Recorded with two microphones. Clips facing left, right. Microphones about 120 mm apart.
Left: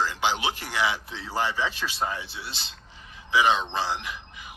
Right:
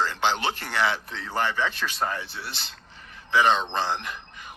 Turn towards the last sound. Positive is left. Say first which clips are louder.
# right 1 dB
turn(degrees=5)  # may be behind; listen again after turning